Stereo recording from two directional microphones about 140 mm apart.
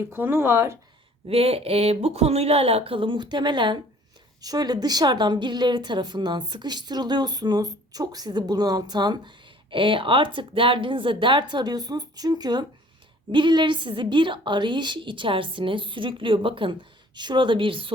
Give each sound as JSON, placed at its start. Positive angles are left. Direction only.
{"t": 0.0, "sound": "speech", "side_deg": -15}
{"t": 1.3, "sound": "a woman's voice", "side_deg": -45}